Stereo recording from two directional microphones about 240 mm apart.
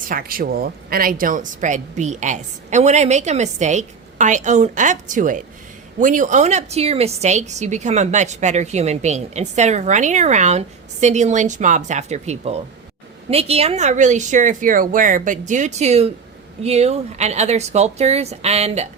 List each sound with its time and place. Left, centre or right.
0.0 s a woman's voice: right